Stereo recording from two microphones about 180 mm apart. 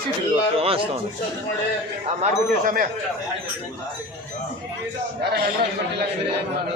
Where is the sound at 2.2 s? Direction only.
50° right (ahead or behind).